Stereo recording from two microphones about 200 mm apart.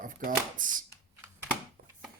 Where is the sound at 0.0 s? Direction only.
45° right (ahead or behind).